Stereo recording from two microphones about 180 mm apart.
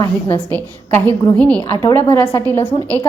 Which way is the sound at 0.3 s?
10° left (ahead or behind).